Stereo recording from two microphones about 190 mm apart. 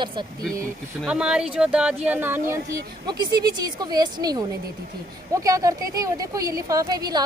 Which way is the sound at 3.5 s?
20° right (ahead or behind).